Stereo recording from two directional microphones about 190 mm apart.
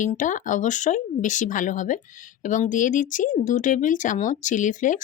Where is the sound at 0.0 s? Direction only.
40° left (ahead or behind).